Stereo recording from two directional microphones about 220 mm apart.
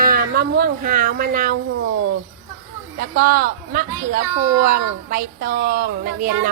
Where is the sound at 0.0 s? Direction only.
40° right (ahead or behind).